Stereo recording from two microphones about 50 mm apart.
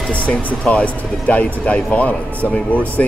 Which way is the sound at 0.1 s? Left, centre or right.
Left.